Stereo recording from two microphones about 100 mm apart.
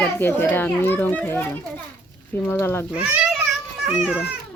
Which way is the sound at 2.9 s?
15° right (ahead or behind).